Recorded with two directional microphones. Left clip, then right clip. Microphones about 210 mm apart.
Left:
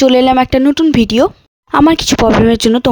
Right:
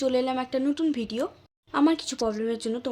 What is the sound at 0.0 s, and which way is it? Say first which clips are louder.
Speech: left 17 dB; 50° left (ahead or behind).